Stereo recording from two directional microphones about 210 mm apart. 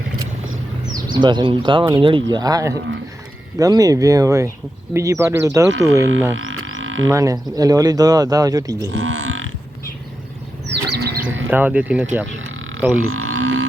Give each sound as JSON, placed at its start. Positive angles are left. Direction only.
{"t": 1.0, "sound": "speech", "side_deg": -20}
{"t": 6.3, "sound": "didgeridoo", "side_deg": -70}
{"t": 7.1, "sound": "speech", "side_deg": -15}
{"t": 8.9, "sound": "whale vocalization", "side_deg": -65}
{"t": 10.7, "sound": "bird", "side_deg": -50}
{"t": 11.4, "sound": "speech", "side_deg": -10}
{"t": 13.0, "sound": "didgeridoo", "side_deg": -90}